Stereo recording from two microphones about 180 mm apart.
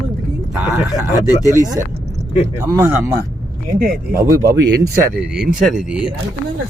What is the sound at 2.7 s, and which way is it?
Speech, 15° right (ahead or behind).